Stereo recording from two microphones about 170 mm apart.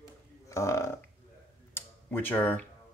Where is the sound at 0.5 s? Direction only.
15° left (ahead or behind).